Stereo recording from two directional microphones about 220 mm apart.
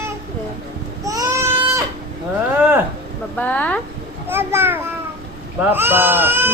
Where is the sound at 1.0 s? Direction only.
15° right (ahead or behind).